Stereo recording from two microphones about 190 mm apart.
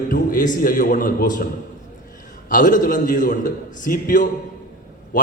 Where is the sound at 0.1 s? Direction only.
45° left (ahead or behind).